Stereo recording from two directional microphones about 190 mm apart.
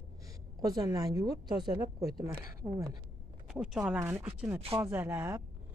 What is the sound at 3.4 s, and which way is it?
Speech, centre (ahead or behind).